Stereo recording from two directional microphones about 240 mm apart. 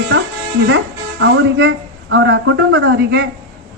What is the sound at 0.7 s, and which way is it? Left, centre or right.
A woman's voice, right.